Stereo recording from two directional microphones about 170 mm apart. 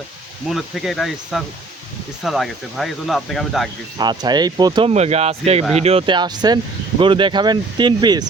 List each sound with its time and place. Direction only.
0.4 s speech: centre (ahead or behind)
3.9 s speech: 25° right (ahead or behind)